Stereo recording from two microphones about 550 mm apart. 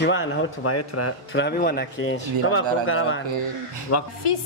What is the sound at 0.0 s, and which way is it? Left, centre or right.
Speech, left.